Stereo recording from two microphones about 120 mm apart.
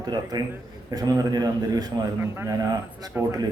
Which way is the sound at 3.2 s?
20° right (ahead or behind).